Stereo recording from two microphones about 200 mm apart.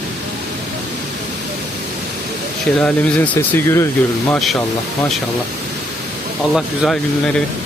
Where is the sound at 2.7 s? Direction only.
5° left (ahead or behind).